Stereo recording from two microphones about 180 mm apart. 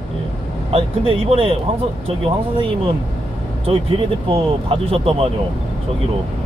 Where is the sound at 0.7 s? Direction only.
30° right (ahead or behind).